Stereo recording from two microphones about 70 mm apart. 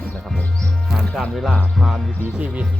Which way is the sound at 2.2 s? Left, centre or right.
Right.